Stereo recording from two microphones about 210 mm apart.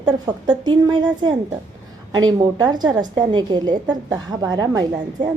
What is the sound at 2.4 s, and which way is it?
A woman's voice, 20° right (ahead or behind).